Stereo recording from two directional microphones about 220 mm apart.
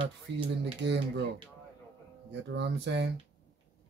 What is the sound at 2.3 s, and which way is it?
Speech, 55° right (ahead or behind).